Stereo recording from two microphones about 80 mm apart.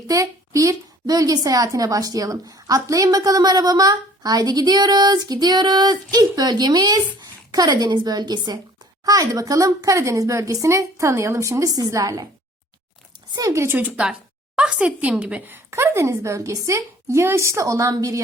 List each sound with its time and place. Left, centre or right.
0.1 s a woman's voice: right
9.0 s a woman's voice: right
13.3 s a woman's voice: right
13.7 s a woman's voice: centre; by 18.2 s right